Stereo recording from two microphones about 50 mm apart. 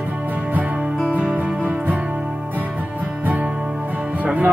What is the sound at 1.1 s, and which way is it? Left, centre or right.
Music, right.